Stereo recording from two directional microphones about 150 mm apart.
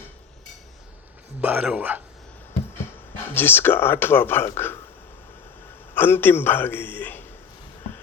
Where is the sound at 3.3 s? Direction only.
15° left (ahead or behind).